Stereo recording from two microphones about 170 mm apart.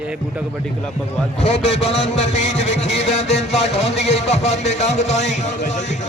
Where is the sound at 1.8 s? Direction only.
40° left (ahead or behind).